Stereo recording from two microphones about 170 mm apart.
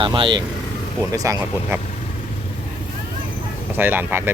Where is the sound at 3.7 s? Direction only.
10° right (ahead or behind).